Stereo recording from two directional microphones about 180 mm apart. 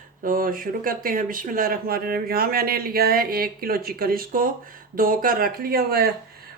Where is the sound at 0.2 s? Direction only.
50° right (ahead or behind).